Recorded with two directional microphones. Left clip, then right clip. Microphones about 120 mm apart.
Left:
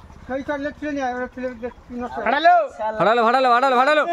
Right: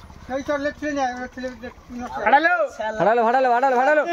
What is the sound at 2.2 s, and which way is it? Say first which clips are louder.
Speech: left 1 dB; 50° left (ahead or behind).